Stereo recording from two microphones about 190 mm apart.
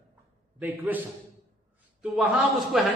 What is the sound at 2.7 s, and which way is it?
Speech, centre (ahead or behind).